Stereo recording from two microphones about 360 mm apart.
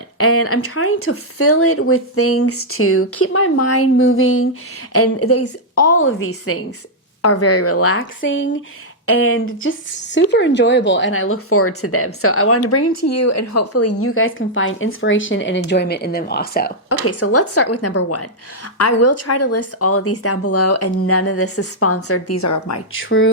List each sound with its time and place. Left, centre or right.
0.2 s speech: left
17.1 s speech: left
22.9 s speech: left